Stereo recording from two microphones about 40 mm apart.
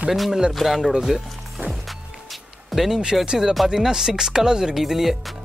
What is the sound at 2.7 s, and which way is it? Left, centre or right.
Speech, centre.